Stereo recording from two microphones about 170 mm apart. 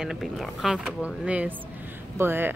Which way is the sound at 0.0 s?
Centre (ahead or behind).